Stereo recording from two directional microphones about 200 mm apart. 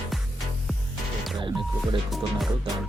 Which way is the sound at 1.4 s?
25° right (ahead or behind).